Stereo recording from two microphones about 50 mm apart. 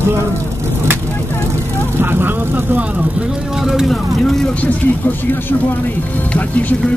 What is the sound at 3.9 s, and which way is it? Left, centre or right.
Speech, centre.